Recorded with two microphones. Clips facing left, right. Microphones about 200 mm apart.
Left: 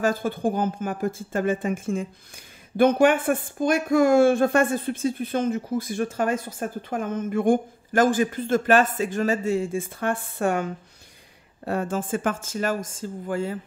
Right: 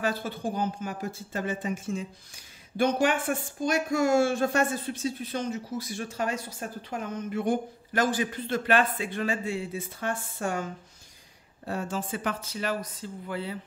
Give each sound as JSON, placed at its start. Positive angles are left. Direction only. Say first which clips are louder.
{"t": 0.0, "sound": "speech", "louder": "left 7 dB", "side_deg": 50}